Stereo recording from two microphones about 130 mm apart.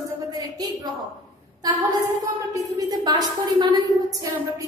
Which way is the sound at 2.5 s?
30° right (ahead or behind).